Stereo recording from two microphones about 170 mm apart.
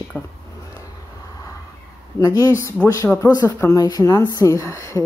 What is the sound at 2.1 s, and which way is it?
Speech, 20° left (ahead or behind).